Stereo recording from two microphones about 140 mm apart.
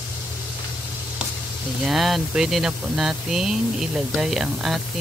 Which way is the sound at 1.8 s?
Centre (ahead or behind).